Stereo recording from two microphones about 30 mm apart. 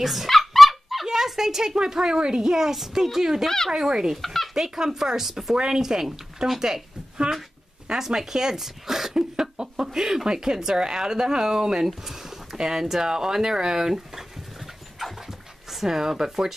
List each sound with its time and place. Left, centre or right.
0.0 s speech: centre
0.3 s dog: centre
1.0 s a woman's voice: centre
2.5 s speech: centre
3.4 s speech: centre
3.7 s speech: centre
4.2 s a sound: centre
4.6 s speech: centre
7.9 s speech: centre
9.6 s a sound: right
9.9 s speech: centre
15.2 s dog: centre